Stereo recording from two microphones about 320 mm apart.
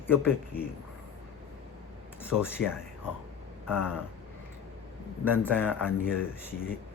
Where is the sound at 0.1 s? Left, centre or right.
Centre.